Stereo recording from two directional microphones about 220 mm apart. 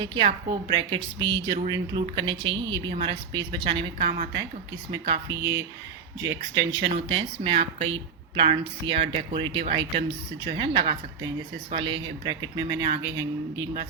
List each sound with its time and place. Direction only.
0.0 s speech: 20° right (ahead or behind)
6.2 s speech: 55° right (ahead or behind)
6.8 s speech: 25° right (ahead or behind)